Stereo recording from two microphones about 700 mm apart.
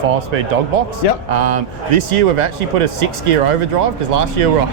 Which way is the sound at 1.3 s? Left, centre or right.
Right.